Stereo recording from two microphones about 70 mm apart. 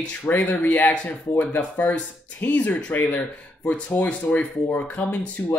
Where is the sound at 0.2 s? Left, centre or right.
Left.